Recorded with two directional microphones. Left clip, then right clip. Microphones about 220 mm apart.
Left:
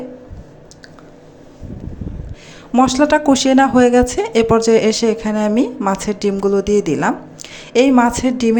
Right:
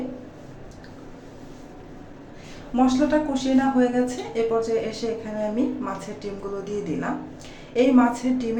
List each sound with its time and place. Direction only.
2.7 s speech: 45° left (ahead or behind)